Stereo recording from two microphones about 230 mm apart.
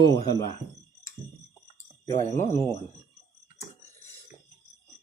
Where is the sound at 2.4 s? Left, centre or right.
Left.